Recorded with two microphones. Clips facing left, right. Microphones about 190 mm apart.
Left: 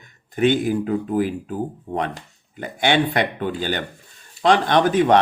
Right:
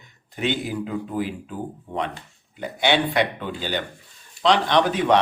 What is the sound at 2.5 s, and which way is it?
Speech, 50° left (ahead or behind).